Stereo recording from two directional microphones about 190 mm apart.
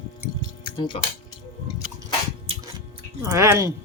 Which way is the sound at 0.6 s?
25° left (ahead or behind).